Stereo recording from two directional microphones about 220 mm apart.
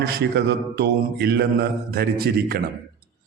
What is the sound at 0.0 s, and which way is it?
A man's voice, 45° right (ahead or behind).